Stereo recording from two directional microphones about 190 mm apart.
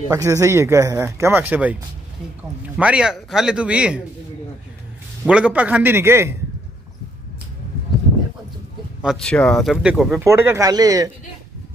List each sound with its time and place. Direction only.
0.1 s a man's voice: 15° right (ahead or behind)
5.2 s speech: 5° right (ahead or behind)
9.0 s a man's voice: centre (ahead or behind); by 11.1 s 20° right (ahead or behind)